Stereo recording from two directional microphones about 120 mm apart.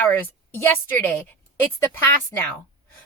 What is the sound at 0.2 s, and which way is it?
A woman's voice, 15° left (ahead or behind).